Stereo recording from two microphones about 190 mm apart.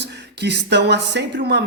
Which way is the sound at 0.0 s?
60° right (ahead or behind).